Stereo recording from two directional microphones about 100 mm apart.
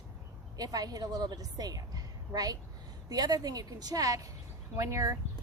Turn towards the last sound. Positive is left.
turn(degrees=-35)  # may be behind; listen again after turning